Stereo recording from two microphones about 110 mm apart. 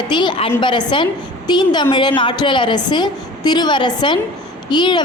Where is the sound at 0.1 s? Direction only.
45° left (ahead or behind).